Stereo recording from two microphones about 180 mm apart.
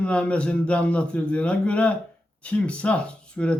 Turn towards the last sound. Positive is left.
turn(degrees=5)  # may be behind; listen again after turning